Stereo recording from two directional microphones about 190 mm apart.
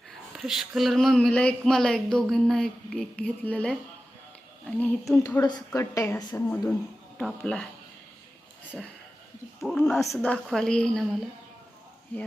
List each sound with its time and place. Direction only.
0.3 s a woman's voice: centre (ahead or behind)
5.4 s a woman's voice: 20° left (ahead or behind)
9.6 s speech: centre (ahead or behind)